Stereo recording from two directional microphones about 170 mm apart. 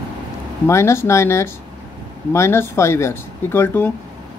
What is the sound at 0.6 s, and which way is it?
Speech, 15° left (ahead or behind).